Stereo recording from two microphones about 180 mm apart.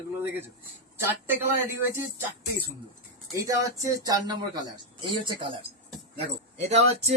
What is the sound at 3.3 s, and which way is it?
Speech, 20° right (ahead or behind).